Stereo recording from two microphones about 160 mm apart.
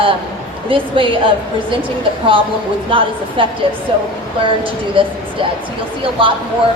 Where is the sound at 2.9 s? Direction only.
35° right (ahead or behind).